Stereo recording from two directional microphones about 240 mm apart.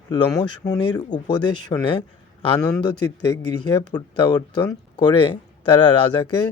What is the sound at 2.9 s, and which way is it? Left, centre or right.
Speech, left.